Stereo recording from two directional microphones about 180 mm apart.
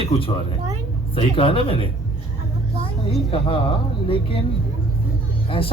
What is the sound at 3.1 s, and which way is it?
A man's voice, 30° left (ahead or behind).